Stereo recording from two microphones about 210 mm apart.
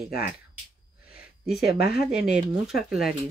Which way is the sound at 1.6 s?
50° left (ahead or behind).